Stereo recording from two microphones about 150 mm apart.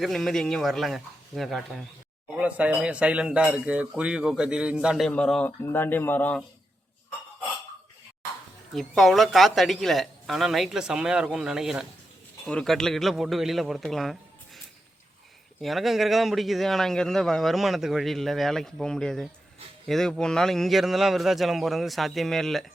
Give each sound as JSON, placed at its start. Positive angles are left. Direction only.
{"t": 0.0, "sound": "speech", "side_deg": 0}
{"t": 8.7, "sound": "speech", "side_deg": 0}
{"t": 15.6, "sound": "speech", "side_deg": 0}